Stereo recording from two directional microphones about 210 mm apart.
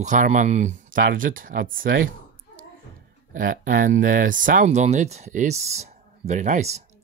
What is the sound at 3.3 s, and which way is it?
Speech, 40° right (ahead or behind).